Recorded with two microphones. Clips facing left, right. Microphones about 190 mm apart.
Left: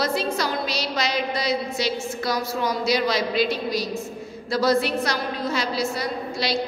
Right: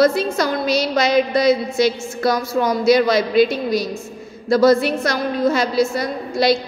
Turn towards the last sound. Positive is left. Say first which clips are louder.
# right 8 dB
turn(degrees=-50)  # may be behind; listen again after turning